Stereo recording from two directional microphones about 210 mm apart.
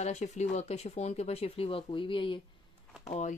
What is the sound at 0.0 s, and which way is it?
Speech, 35° left (ahead or behind).